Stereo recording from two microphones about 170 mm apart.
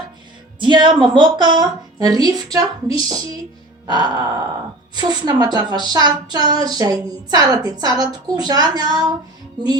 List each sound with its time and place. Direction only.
0.6 s a woman's voice: 30° right (ahead or behind)